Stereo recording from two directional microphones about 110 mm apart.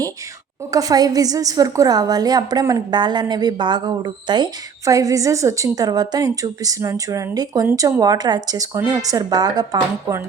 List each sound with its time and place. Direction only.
0.7 s speech: 35° right (ahead or behind)